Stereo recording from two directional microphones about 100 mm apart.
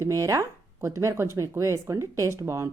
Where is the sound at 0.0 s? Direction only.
30° right (ahead or behind).